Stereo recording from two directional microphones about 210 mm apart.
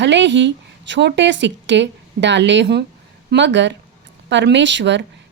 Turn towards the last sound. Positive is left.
turn(degrees=-60)  # may be behind; listen again after turning